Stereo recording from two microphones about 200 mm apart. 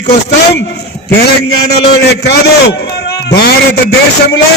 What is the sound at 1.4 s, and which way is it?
A man's voice, 55° left (ahead or behind).